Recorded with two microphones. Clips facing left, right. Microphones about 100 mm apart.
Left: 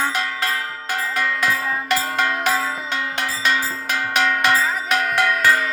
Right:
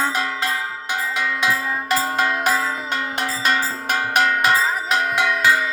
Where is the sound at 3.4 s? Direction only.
40° right (ahead or behind).